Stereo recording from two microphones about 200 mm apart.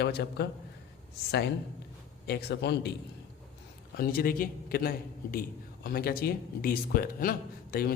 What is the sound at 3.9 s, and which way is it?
Speech, 50° left (ahead or behind).